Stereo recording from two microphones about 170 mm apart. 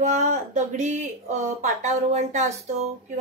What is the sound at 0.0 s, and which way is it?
Speech, 45° right (ahead or behind).